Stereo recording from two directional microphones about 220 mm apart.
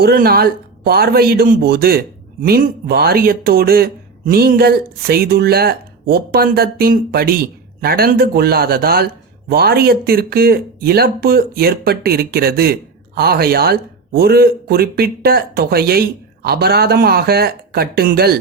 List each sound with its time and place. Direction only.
0.0 s speech: 45° right (ahead or behind)